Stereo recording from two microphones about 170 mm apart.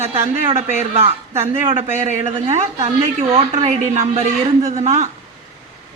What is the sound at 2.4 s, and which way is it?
A woman's voice, 35° right (ahead or behind).